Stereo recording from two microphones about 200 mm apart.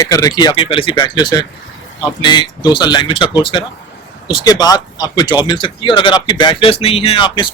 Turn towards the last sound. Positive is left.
turn(degrees=25)  # may be behind; listen again after turning